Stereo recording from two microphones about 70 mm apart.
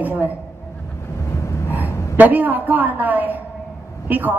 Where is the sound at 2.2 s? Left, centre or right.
Right.